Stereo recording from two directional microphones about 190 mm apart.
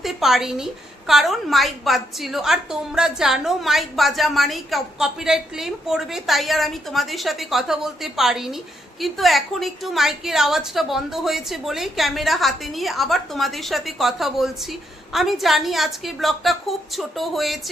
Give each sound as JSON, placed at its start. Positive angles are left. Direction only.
{"t": 0.0, "sound": "a woman's voice", "side_deg": 0}